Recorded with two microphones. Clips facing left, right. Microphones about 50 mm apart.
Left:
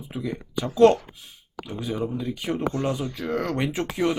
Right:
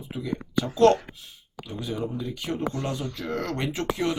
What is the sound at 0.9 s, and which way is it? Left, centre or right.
Speech, right.